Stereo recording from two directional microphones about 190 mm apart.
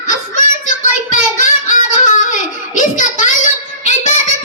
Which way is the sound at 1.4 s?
40° left (ahead or behind).